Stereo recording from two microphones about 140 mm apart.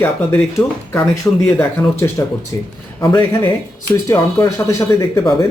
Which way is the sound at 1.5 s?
20° left (ahead or behind).